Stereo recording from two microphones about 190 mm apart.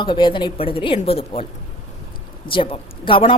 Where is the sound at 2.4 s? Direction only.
25° left (ahead or behind).